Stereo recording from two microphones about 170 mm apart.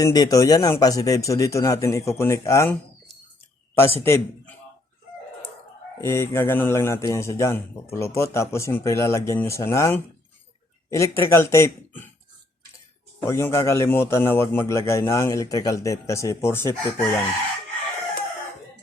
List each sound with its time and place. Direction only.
0.0 s speech: 20° left (ahead or behind)
3.8 s a man's voice: 15° left (ahead or behind)
6.0 s speech: 15° left (ahead or behind)
13.2 s speech: 15° left (ahead or behind)